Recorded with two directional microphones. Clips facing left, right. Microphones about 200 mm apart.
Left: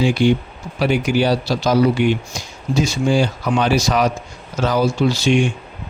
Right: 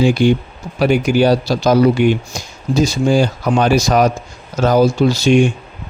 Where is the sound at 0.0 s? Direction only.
45° right (ahead or behind).